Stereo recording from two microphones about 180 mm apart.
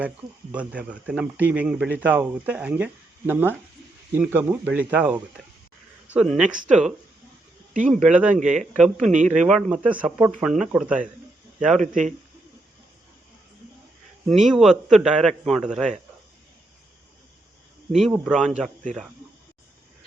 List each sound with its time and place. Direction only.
0.5 s speech: 5° right (ahead or behind)
6.1 s a man's voice: 5° right (ahead or behind)
7.7 s speech: 45° right (ahead or behind)
7.9 s a man's voice: 5° right (ahead or behind)
8.3 s a man's voice: 45° right (ahead or behind)
8.7 s a man's voice: 5° right (ahead or behind)
11.8 s a man's voice: 45° right (ahead or behind)
14.3 s a man's voice: centre (ahead or behind)
17.9 s a man's voice: centre (ahead or behind)